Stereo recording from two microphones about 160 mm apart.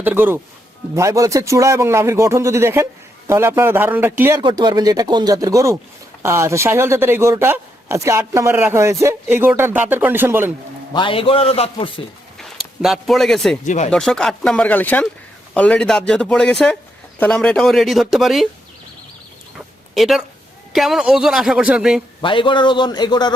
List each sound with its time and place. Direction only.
0.0 s speech: 10° right (ahead or behind)
4.4 s speech: 25° right (ahead or behind)
10.9 s a man's voice: 30° left (ahead or behind)
12.4 s speech: centre (ahead or behind)
13.7 s speech: 45° left (ahead or behind)
13.9 s speech: 5° left (ahead or behind)
19.5 s a sound: centre (ahead or behind)
20.7 s speech: centre (ahead or behind)
22.2 s a man's voice: 30° left (ahead or behind)